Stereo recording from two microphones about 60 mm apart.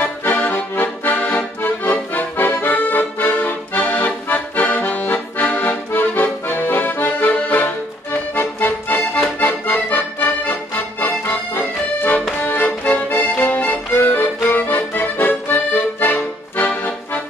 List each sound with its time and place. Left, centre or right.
0.0 s accordion: left
11.0 s music: left